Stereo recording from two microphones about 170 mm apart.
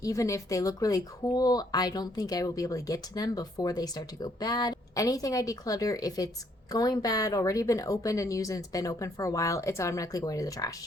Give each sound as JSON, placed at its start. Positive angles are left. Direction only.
{"t": 0.0, "sound": "speech", "side_deg": 20}